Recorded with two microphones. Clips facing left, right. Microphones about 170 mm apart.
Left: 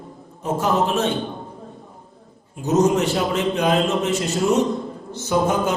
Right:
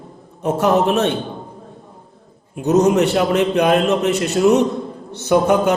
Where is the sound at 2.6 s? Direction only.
65° right (ahead or behind).